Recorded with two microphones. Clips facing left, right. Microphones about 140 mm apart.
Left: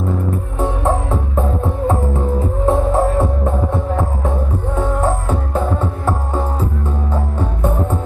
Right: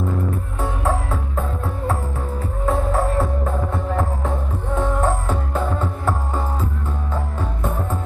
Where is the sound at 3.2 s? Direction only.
15° left (ahead or behind).